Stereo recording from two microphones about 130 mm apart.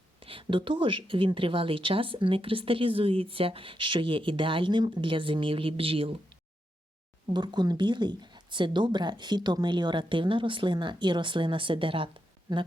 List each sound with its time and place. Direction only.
0.2 s speech: 45° right (ahead or behind)
7.3 s speech: 35° right (ahead or behind)